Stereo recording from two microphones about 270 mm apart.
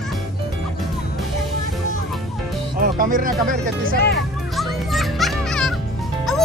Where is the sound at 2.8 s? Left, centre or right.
Right.